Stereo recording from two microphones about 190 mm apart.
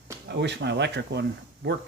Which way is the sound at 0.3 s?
65° right (ahead or behind).